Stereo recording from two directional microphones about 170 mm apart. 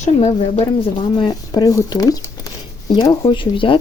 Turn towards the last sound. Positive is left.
turn(degrees=30)  # may be behind; listen again after turning